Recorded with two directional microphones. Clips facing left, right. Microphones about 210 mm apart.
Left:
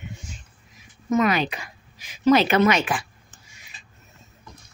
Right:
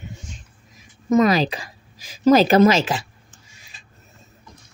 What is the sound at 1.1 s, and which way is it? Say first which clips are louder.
A woman's voice: right 4 dB; 35° right (ahead or behind).